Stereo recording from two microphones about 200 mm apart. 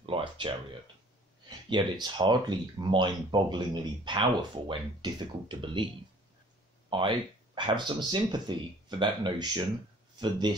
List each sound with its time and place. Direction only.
0.0 s a sound: 25° right (ahead or behind)
1.7 s speech: 20° right (ahead or behind)
6.9 s speech: 25° right (ahead or behind)